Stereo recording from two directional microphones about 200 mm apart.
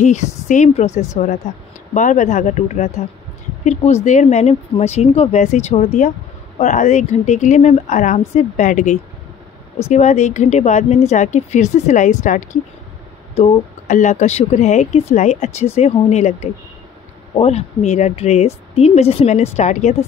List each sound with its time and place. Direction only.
0.0 s speech: 35° left (ahead or behind)